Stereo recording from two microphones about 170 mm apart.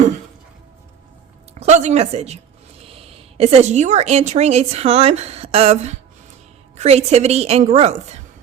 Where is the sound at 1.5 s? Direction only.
40° right (ahead or behind).